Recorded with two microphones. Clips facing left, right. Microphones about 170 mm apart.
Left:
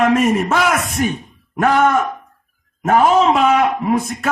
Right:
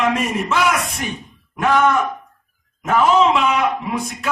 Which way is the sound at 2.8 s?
45° left (ahead or behind).